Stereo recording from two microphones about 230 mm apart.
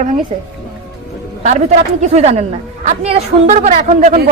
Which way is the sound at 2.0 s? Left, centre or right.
Right.